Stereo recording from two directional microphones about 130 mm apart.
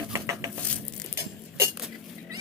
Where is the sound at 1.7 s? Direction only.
Centre (ahead or behind).